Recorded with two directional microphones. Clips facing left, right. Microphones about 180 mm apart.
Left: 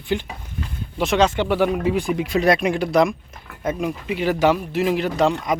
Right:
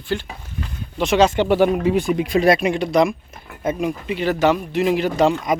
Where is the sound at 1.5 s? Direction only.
25° right (ahead or behind).